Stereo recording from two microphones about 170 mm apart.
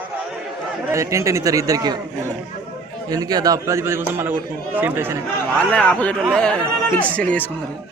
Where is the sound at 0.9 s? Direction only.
15° right (ahead or behind).